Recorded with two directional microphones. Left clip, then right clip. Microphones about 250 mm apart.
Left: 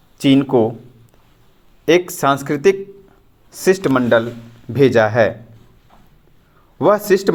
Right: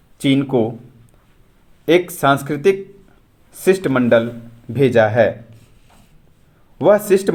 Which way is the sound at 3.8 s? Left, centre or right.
Centre.